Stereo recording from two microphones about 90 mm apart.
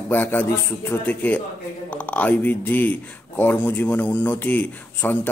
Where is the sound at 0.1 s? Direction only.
20° left (ahead or behind).